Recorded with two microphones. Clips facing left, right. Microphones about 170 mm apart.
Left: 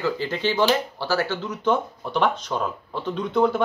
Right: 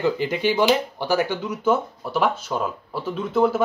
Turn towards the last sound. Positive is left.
turn(degrees=-5)  # may be behind; listen again after turning